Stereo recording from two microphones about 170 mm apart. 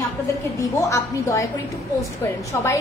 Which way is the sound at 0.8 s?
20° left (ahead or behind).